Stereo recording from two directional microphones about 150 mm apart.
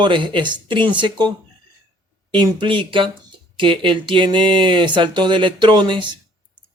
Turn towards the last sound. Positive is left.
turn(degrees=-30)  # may be behind; listen again after turning